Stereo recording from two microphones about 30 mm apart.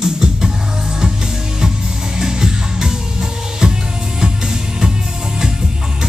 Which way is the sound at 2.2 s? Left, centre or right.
Right.